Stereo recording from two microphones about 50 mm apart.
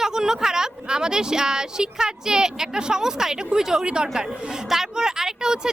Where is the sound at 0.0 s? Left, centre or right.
Centre.